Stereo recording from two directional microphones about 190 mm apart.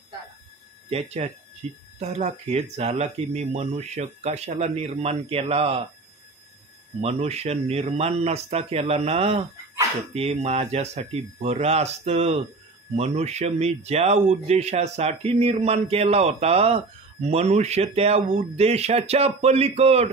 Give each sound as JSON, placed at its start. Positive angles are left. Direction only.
{"t": 0.8, "sound": "speech", "side_deg": -35}
{"t": 7.0, "sound": "speech", "side_deg": -35}